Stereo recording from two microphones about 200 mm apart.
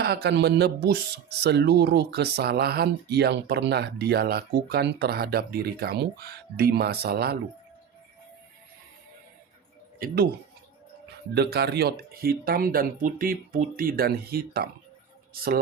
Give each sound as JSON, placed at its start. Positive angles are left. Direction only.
{"t": 0.0, "sound": "speech", "side_deg": -55}
{"t": 10.0, "sound": "speech", "side_deg": -45}
{"t": 11.3, "sound": "speech", "side_deg": -55}